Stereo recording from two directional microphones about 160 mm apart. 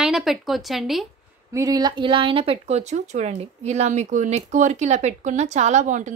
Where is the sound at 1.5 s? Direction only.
25° right (ahead or behind).